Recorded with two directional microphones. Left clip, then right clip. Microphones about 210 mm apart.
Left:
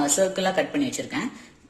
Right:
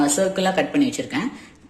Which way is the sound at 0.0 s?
5° left (ahead or behind).